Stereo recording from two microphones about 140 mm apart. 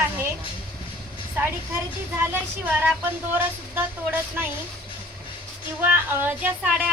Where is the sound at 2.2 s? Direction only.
15° right (ahead or behind).